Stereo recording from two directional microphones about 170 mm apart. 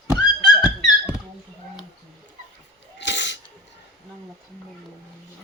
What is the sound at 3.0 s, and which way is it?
Sneeze, 90° left.